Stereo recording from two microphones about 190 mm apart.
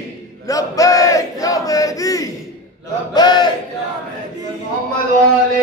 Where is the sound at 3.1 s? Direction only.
20° left (ahead or behind).